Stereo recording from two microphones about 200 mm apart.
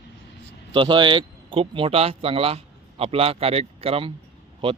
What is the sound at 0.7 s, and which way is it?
Speech, 25° right (ahead or behind).